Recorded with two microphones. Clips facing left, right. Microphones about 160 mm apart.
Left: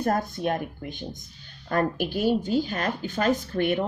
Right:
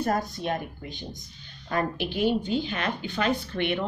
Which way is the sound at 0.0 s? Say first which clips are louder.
Left 2 dB; 50° left (ahead or behind).